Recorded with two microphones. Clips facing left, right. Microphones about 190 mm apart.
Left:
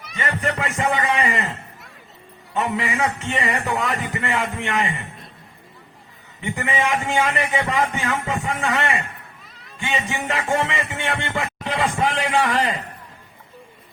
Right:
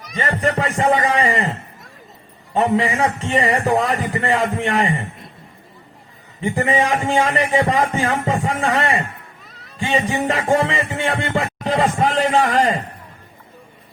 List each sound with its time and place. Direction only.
0.0 s a man's voice: 35° right (ahead or behind)
2.5 s music: 35° right (ahead or behind)
6.4 s music: 35° right (ahead or behind)